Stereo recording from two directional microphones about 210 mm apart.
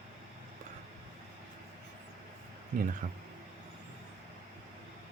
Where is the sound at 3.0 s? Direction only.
40° right (ahead or behind).